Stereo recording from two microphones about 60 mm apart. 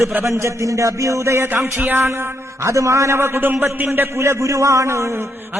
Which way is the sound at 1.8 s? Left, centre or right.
Right.